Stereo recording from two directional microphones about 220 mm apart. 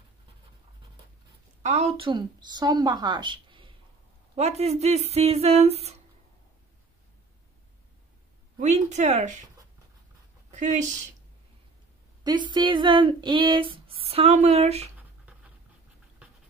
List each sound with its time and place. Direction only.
1.6 s speech: 30° right (ahead or behind)
8.5 s speech: 30° right (ahead or behind)
10.5 s a woman's voice: 35° right (ahead or behind)
12.2 s speech: 20° right (ahead or behind)